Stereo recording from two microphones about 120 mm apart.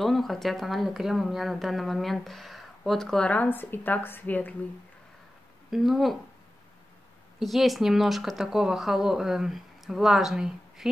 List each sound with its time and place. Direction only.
0.0 s speech: centre (ahead or behind)
5.7 s speech: centre (ahead or behind)
7.3 s speech: centre (ahead or behind)